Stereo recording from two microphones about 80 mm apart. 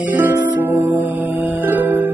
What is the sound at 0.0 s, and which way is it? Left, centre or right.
Music, right.